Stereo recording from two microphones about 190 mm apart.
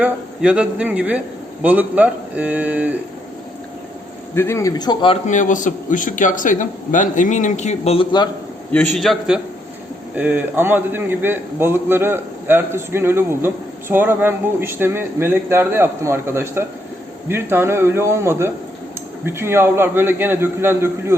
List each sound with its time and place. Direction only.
0.0 s a man's voice: 5° right (ahead or behind)
4.4 s a man's voice: 15° left (ahead or behind)
8.7 s a man's voice: 5° left (ahead or behind); by 21.2 s 15° right (ahead or behind)